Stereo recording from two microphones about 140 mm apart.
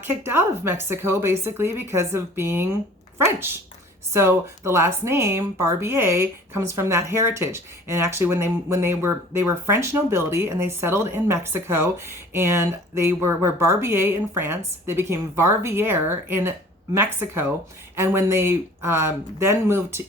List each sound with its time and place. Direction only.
0.0 s speech: 15° right (ahead or behind)
4.1 s speech: 20° right (ahead or behind)